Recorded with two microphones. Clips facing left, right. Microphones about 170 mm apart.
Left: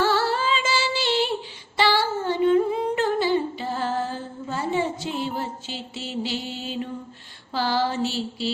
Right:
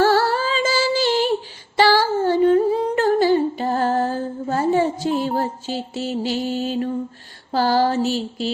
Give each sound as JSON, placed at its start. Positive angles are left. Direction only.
{"t": 0.0, "sound": "music", "side_deg": -45}
{"t": 1.8, "sound": "humming", "side_deg": -40}
{"t": 7.5, "sound": "a sound", "side_deg": -45}